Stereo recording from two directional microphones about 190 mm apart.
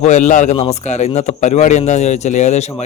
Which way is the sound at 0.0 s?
40° left (ahead or behind).